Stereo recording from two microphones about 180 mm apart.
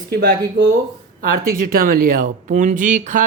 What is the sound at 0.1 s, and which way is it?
A man's voice, 60° right (ahead or behind).